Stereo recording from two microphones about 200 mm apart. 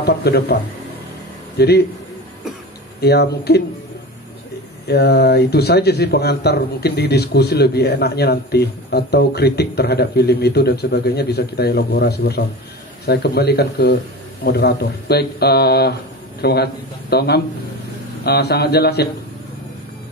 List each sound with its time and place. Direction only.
0.0 s speech: 55° left (ahead or behind)
1.6 s speech: 55° left (ahead or behind)
3.0 s speech: 55° left (ahead or behind)
4.8 s a man's voice: 55° left (ahead or behind)